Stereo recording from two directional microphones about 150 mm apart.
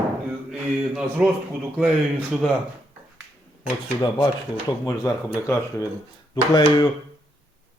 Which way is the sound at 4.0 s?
25° left (ahead or behind).